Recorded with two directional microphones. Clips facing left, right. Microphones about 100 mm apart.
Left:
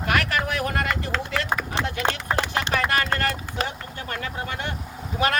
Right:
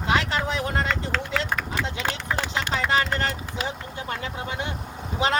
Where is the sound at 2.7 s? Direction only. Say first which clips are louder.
Even; 20° right (ahead or behind).